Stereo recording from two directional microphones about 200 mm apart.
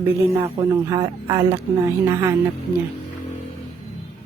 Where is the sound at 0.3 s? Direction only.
20° right (ahead or behind).